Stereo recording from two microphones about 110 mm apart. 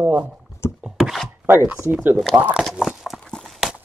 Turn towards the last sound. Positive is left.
turn(degrees=0)  # may be behind; listen again after turning